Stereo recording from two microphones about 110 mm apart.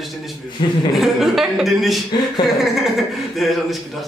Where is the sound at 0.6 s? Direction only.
50° left (ahead or behind).